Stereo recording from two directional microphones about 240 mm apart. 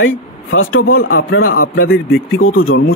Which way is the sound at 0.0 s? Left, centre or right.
Left.